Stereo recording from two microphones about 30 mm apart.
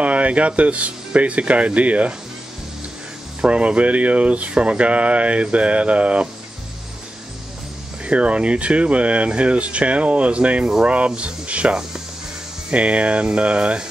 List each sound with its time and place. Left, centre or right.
0.0 s speech: right
3.4 s speech: right
8.0 s speech: right
12.7 s speech: right